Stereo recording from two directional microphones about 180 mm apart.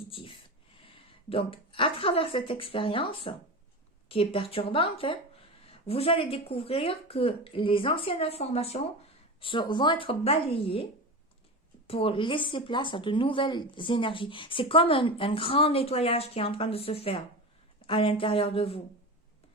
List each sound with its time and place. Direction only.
0.1 s speech: 30° left (ahead or behind)
11.9 s speech: 30° left (ahead or behind)